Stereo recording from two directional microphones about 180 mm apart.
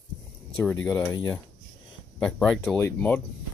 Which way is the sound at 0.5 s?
10° left (ahead or behind).